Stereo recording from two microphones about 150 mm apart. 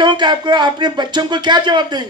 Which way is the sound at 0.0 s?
30° right (ahead or behind).